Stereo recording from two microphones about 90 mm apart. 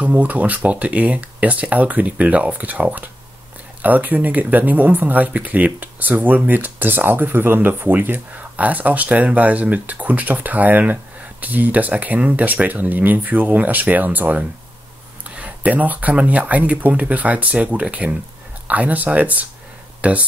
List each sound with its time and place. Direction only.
0.0 s speech: 15° right (ahead or behind)